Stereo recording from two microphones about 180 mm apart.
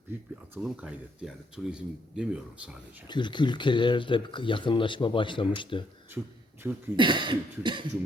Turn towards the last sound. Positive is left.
turn(degrees=-25)  # may be behind; listen again after turning